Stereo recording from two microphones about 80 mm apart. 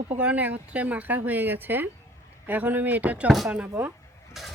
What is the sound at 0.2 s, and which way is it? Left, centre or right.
Speech, centre.